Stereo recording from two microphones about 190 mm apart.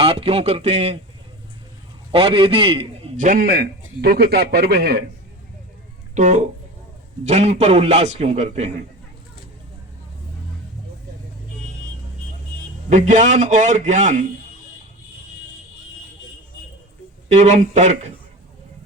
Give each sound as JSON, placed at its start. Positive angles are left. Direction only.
{"t": 0.0, "sound": "a man's voice", "side_deg": -30}
{"t": 2.1, "sound": "a man's voice", "side_deg": -30}
{"t": 3.2, "sound": "a man's voice", "side_deg": -50}
{"t": 6.1, "sound": "a man's voice", "side_deg": -40}
{"t": 12.9, "sound": "a man's voice", "side_deg": -40}
{"t": 17.2, "sound": "a man's voice", "side_deg": -40}